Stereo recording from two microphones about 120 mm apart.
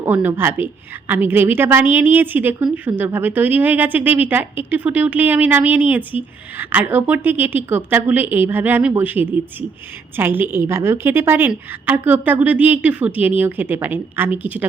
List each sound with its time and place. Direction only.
0.0 s a woman's voice: 15° right (ahead or behind)